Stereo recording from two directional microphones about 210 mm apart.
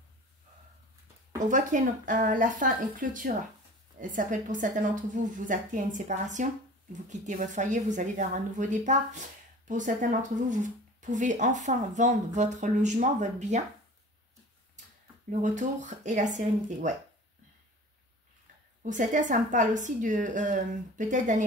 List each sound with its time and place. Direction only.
1.4 s speech: 35° right (ahead or behind)
15.4 s speech: 35° right (ahead or behind)
18.8 s speech: 35° right (ahead or behind)